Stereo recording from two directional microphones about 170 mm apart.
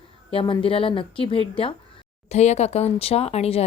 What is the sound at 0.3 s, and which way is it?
Speech, 30° left (ahead or behind).